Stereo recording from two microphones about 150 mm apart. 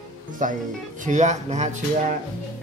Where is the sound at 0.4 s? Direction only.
60° right (ahead or behind).